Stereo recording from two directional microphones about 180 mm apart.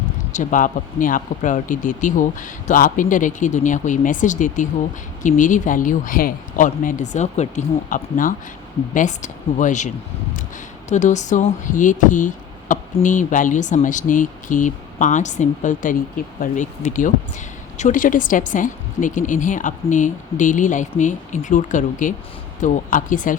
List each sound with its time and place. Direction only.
0.3 s speech: 45° left (ahead or behind)